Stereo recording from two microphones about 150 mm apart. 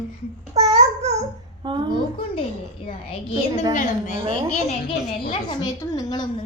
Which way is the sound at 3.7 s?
55° left (ahead or behind).